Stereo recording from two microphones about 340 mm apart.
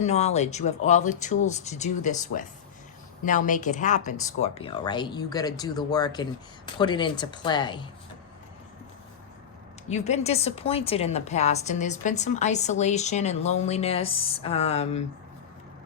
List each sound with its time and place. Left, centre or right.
0.0 s a woman's voice: centre
9.9 s a woman's voice: centre